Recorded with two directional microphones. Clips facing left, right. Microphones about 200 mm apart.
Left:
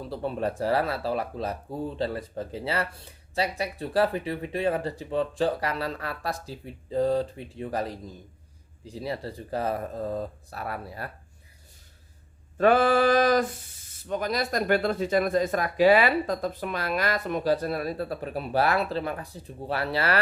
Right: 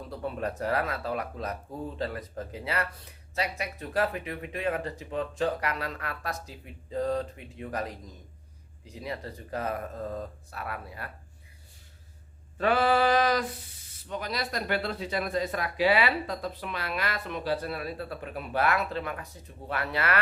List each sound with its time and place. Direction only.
0.1 s speech: 30° left (ahead or behind)
12.5 s speech: 50° left (ahead or behind)